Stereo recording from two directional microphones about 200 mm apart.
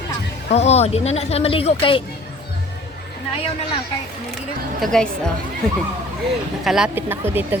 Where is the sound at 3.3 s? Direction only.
30° left (ahead or behind).